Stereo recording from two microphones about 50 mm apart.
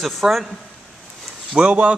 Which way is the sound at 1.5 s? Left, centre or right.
Right.